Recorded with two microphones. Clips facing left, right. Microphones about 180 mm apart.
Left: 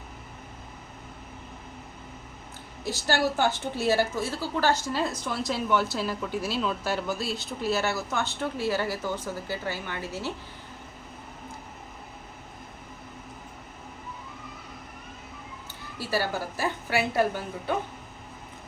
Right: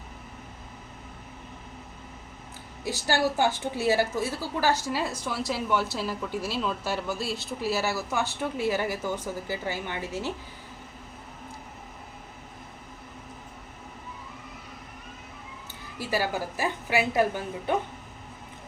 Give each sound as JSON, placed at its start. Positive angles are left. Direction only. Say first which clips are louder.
{"t": 2.8, "sound": "a woman's voice", "louder": "even", "side_deg": -15}
{"t": 16.0, "sound": "a woman's voice", "louder": "even", "side_deg": -15}